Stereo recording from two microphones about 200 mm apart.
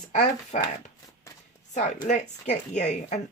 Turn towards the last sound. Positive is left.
turn(degrees=35)  # may be behind; listen again after turning